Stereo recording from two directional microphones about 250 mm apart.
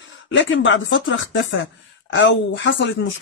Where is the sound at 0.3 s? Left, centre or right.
Left.